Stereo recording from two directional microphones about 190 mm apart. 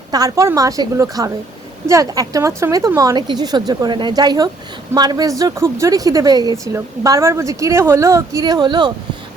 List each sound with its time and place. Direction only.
0.1 s a woman's voice: 20° right (ahead or behind)